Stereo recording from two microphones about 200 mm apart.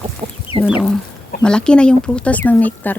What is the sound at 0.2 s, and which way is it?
Chicken, 25° right (ahead or behind).